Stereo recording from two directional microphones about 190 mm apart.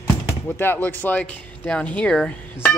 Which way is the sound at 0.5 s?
10° left (ahead or behind).